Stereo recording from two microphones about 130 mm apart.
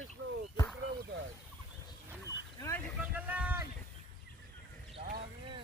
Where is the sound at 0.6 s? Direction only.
30° left (ahead or behind).